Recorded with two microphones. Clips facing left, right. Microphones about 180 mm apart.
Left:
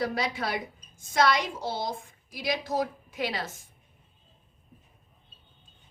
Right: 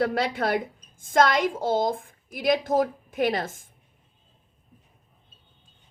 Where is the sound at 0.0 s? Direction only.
55° right (ahead or behind).